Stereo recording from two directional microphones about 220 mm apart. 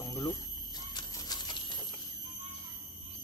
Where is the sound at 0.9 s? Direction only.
20° left (ahead or behind).